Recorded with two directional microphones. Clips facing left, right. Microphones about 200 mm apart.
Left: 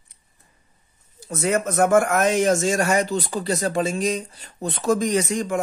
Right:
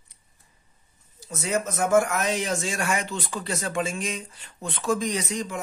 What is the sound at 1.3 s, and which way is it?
Speech, 55° left (ahead or behind).